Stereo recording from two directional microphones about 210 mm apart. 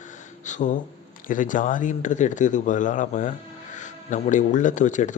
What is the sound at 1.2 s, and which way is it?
Speech, 40° left (ahead or behind).